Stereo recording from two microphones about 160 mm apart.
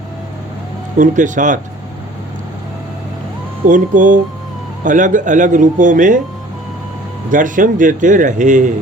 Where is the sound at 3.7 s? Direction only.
55° right (ahead or behind).